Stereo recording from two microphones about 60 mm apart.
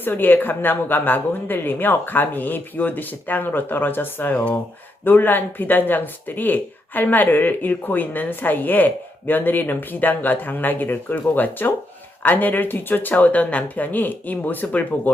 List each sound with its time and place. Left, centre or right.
0.0 s speech: left